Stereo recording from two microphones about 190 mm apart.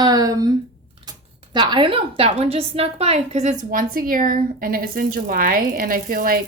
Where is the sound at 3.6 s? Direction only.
45° right (ahead or behind).